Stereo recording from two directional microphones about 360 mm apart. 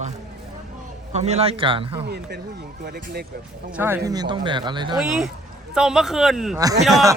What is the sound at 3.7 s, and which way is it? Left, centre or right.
Speech, centre.